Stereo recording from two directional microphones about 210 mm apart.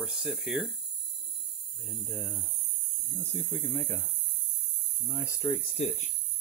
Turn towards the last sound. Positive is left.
turn(degrees=20)  # may be behind; listen again after turning